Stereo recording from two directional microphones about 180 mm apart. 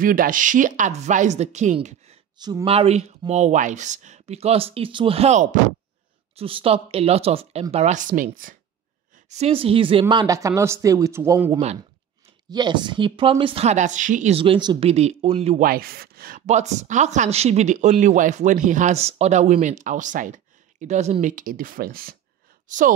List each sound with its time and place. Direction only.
0.0 s speech: 50° right (ahead or behind)
2.3 s speech: 25° right (ahead or behind); by 8.5 s 50° right (ahead or behind)
9.3 s speech: 35° right (ahead or behind)
15.6 s speech: 55° right (ahead or behind)